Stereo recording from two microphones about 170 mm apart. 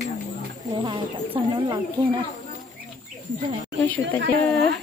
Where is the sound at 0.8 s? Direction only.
30° right (ahead or behind).